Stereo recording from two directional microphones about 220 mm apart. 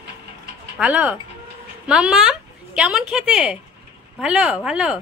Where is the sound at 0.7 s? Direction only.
5° right (ahead or behind).